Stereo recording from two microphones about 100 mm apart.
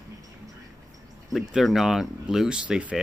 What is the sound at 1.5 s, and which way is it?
Speech, centre (ahead or behind).